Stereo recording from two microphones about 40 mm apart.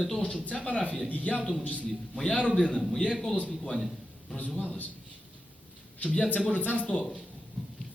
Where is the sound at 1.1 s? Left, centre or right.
Left.